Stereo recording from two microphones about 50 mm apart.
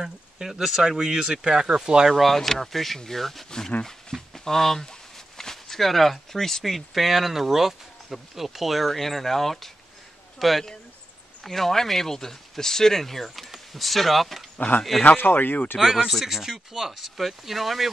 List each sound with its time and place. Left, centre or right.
0.0 s speech: centre
2.1 s speech: centre
15.0 s speech: left
16.1 s speech: centre